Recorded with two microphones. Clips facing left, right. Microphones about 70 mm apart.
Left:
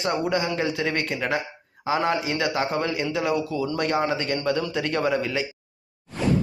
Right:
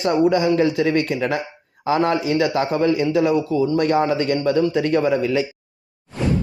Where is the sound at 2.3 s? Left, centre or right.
Right.